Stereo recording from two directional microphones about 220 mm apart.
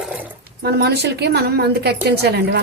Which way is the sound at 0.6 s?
50° right (ahead or behind).